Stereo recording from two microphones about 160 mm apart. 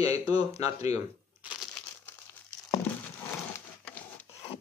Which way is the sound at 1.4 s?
5° right (ahead or behind).